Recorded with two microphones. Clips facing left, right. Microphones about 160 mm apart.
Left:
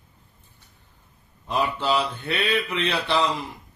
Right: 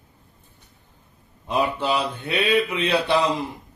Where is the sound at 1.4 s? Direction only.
15° right (ahead or behind).